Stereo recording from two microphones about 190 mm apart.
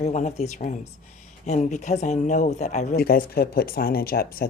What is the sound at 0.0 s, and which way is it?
Speech, 35° left (ahead or behind).